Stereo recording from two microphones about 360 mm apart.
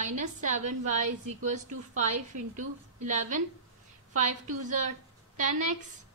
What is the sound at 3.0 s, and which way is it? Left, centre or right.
Speech, right.